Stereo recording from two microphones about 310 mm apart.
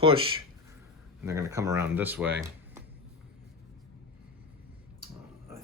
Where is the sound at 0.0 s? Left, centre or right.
Centre.